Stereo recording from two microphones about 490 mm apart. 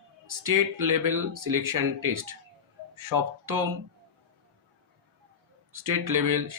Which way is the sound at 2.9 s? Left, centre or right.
Right.